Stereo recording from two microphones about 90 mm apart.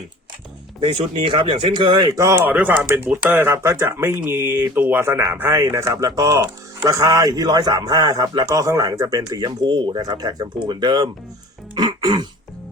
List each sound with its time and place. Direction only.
0.8 s speech: 70° right (ahead or behind)
2.3 s a man's voice: 20° right (ahead or behind); by 11.1 s 50° right (ahead or behind)
11.7 s throat clearing: 60° right (ahead or behind)